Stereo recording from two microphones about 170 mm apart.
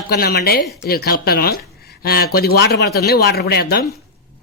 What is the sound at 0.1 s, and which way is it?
Speech, 65° left (ahead or behind).